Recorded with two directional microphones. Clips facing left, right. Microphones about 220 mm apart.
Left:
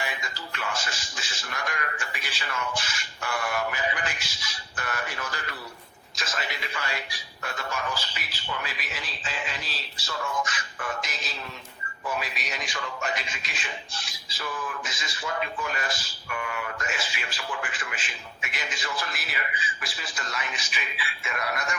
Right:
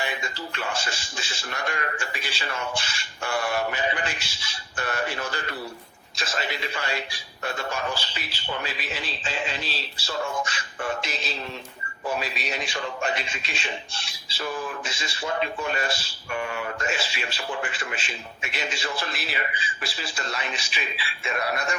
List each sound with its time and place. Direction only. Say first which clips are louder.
0.0 s a man's voice: right 4 dB; 30° right (ahead or behind)